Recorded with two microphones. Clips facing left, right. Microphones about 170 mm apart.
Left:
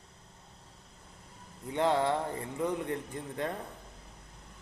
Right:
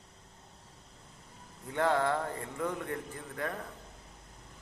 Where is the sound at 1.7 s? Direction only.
20° left (ahead or behind).